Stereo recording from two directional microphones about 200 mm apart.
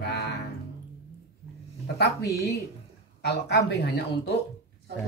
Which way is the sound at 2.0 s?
55° left (ahead or behind).